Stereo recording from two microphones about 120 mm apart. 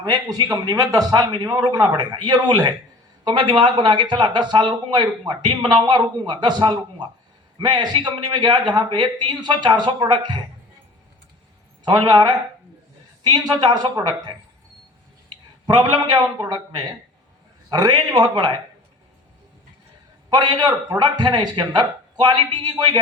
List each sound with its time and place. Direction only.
0.0 s a man's voice: 35° right (ahead or behind)
11.9 s a man's voice: 35° right (ahead or behind)
15.6 s a man's voice: 35° right (ahead or behind)
20.3 s a man's voice: 35° right (ahead or behind)